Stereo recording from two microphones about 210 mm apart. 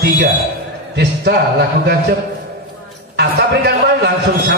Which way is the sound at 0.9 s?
50° right (ahead or behind).